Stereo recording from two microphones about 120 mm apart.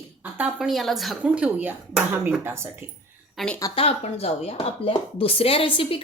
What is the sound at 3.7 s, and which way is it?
Speech, 55° left (ahead or behind).